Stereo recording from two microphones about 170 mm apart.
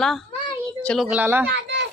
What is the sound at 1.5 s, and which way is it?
Speech, 90° right.